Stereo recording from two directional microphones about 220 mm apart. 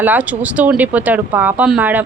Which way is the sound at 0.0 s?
5° right (ahead or behind).